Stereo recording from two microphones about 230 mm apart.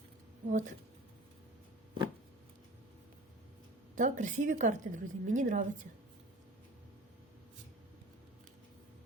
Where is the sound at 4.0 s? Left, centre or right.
Right.